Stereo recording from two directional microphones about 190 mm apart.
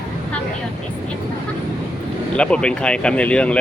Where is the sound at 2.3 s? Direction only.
5° left (ahead or behind).